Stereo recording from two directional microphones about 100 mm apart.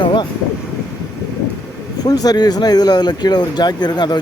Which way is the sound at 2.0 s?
40° left (ahead or behind).